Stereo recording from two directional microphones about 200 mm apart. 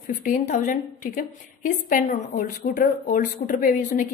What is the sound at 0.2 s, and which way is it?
A woman's voice, 40° left (ahead or behind).